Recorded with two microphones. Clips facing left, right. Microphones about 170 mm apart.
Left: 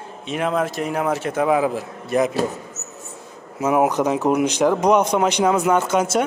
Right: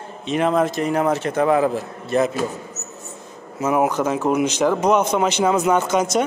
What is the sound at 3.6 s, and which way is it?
Speech, 10° left (ahead or behind).